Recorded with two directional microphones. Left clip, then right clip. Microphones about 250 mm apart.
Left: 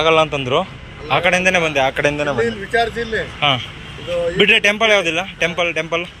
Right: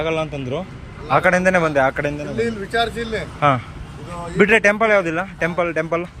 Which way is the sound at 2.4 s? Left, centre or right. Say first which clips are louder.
Left 3 dB; centre.